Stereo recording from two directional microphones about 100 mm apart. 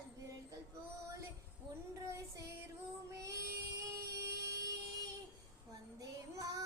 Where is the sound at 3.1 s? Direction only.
30° right (ahead or behind).